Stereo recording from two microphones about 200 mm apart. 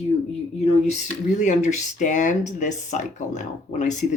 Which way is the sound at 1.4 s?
35° left (ahead or behind).